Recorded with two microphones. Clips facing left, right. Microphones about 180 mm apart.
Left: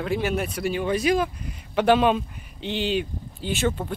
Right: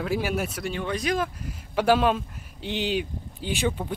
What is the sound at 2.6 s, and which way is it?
Speech, 15° right (ahead or behind).